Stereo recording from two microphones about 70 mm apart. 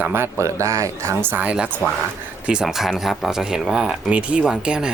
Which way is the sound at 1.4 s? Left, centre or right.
Centre.